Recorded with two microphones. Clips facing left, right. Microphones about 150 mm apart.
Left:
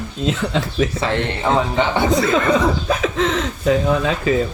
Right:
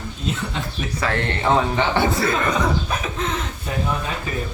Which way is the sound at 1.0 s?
20° left (ahead or behind).